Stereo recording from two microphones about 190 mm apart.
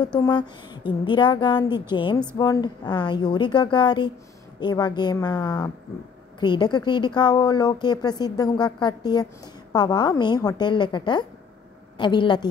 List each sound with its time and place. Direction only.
0.0 s a woman's voice: 20° left (ahead or behind)